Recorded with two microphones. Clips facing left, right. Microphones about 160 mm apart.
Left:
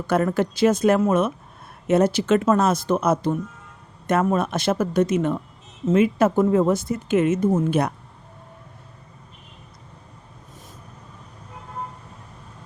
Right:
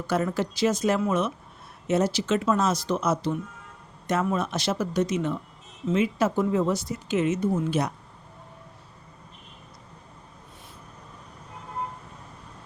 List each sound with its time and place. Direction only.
0.1 s speech: 55° left (ahead or behind)